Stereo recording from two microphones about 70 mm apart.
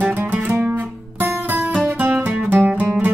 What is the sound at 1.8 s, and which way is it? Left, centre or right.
Music, right.